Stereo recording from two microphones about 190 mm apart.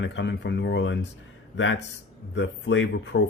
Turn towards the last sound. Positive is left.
turn(degrees=70)  # may be behind; listen again after turning